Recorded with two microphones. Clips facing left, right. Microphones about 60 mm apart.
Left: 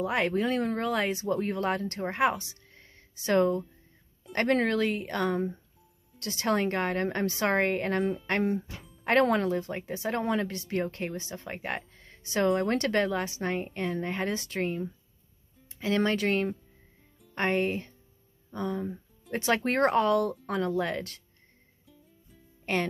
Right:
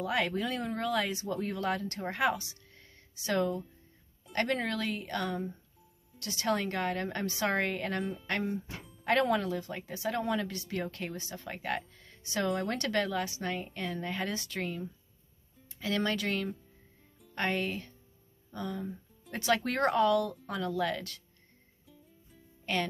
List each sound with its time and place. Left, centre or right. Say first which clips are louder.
0.0 s speech: left 4 dB; left
3.3 s a woman's voice: left 6 dB; left
12.0 s music: left 1 dB; left
12.4 s a woman's voice: left 6 dB; left
12.7 s speech: left 4 dB; left
15.8 s speech: left 5 dB; left
19.6 s speech: left 4 dB; left